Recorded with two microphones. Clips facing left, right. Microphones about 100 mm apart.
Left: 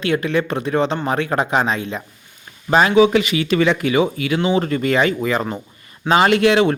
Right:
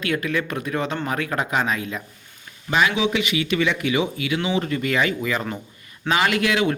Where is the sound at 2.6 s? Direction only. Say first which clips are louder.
Left 8 dB; 40° left (ahead or behind).